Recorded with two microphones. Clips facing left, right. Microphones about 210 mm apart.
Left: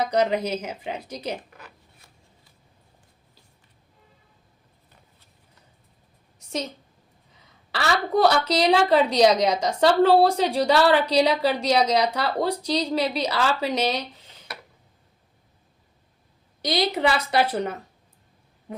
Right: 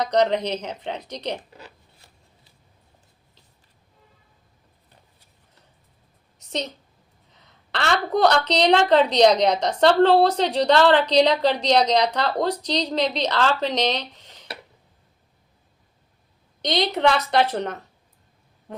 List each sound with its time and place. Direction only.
0.0 s a woman's voice: 5° left (ahead or behind)
1.5 s zipper: 30° right (ahead or behind)
7.7 s a woman's voice: 5° left (ahead or behind)
14.5 s tick-tock: 30° right (ahead or behind)
16.6 s a woman's voice: 5° left (ahead or behind)